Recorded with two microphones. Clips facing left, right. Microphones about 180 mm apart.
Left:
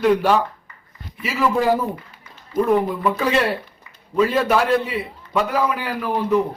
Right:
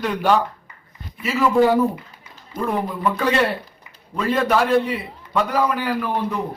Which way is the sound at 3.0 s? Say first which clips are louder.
Even; centre (ahead or behind).